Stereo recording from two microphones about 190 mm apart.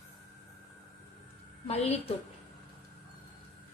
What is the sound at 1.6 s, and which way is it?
Speech, 35° left (ahead or behind).